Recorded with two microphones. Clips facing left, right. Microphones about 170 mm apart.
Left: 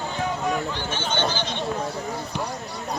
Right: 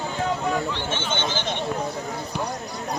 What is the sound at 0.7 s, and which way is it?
Speech, 25° right (ahead or behind).